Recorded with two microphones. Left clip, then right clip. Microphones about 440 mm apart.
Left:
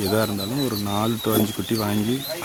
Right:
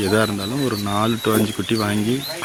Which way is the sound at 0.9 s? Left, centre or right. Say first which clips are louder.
Right 6 dB; left.